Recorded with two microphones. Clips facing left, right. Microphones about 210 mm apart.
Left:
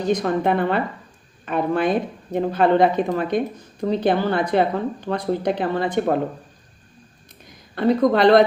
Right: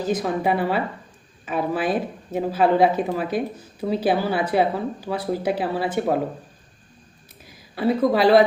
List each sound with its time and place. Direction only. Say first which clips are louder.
0.0 s speech: left 2 dB; 5° right (ahead or behind)
7.4 s speech: left 3 dB; 5° right (ahead or behind)